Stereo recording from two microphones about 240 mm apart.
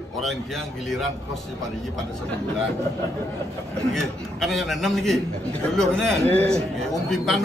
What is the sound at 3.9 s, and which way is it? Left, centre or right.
A man's voice, centre.